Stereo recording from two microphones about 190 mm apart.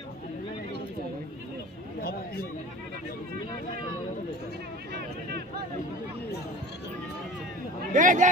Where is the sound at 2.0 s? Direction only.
50° left (ahead or behind).